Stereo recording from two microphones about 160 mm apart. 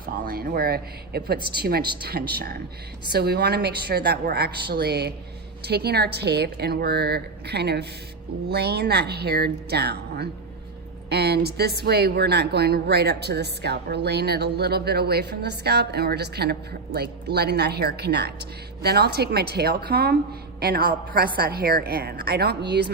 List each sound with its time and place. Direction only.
0.3 s a woman's voice: 70° right (ahead or behind); by 22.9 s 90° right